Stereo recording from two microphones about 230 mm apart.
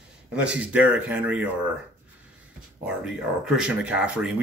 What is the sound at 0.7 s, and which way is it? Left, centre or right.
Speech, centre.